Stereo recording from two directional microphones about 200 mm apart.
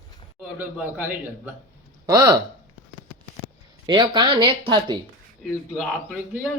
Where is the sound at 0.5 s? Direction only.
10° right (ahead or behind).